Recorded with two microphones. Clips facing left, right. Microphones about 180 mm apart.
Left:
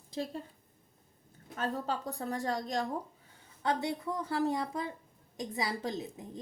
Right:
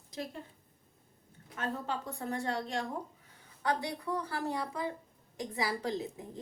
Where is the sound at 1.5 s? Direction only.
35° left (ahead or behind).